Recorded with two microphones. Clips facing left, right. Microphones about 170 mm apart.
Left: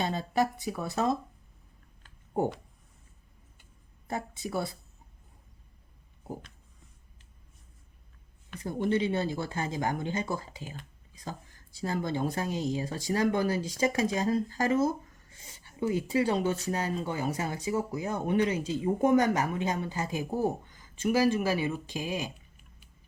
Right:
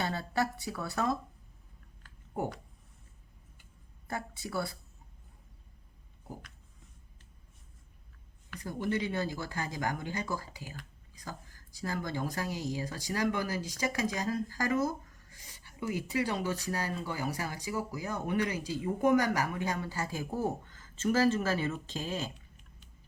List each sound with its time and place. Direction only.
0.0 s speech: 20° left (ahead or behind)
2.0 s a sound: 25° left (ahead or behind)
4.1 s speech: 20° left (ahead or behind)
8.4 s speech: 25° left (ahead or behind)